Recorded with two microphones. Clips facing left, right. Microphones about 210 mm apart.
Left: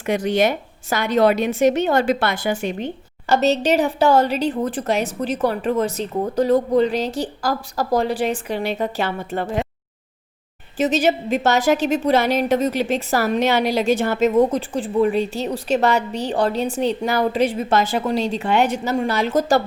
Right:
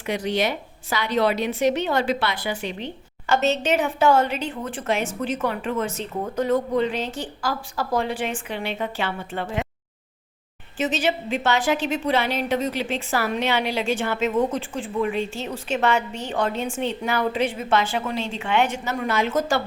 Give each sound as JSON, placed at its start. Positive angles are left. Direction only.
{"t": 0.0, "sound": "a woman's voice", "side_deg": 50}
{"t": 10.8, "sound": "a woman's voice", "side_deg": 40}